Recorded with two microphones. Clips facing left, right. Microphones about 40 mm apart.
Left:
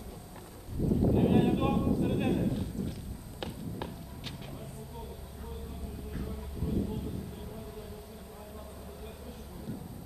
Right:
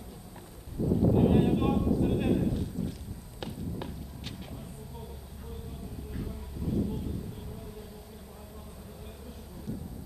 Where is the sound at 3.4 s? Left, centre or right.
Centre.